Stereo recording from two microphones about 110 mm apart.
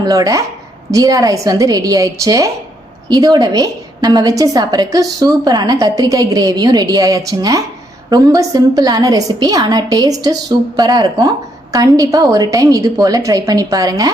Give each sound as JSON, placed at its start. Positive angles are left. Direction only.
{"t": 0.0, "sound": "a woman's voice", "side_deg": -35}